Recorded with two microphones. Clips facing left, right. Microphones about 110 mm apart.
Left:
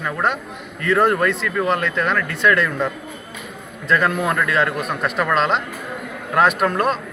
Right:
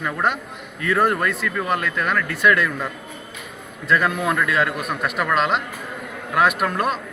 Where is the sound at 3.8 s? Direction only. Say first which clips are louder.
Left 1 dB; 5° right (ahead or behind).